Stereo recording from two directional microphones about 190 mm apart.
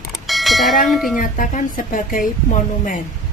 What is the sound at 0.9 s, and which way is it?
Speech, centre (ahead or behind).